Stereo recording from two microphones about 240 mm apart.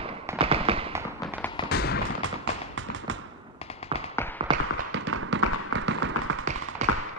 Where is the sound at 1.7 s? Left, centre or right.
Left.